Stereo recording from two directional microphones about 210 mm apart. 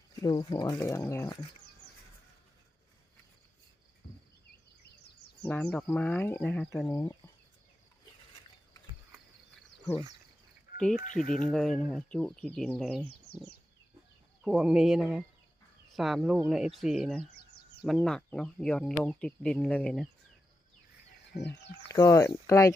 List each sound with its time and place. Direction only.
0.2 s speech: 20° left (ahead or behind)
5.5 s speech: 5° left (ahead or behind)
10.8 s speech: 5° left (ahead or behind)
11.0 s speech: 35° left (ahead or behind)
11.4 s speech: centre (ahead or behind)
14.4 s speech: 5° right (ahead or behind)
21.4 s speech: 55° left (ahead or behind)
21.9 s speech: 15° left (ahead or behind)